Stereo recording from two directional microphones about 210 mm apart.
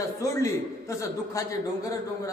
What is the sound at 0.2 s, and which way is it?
Speech, 15° left (ahead or behind).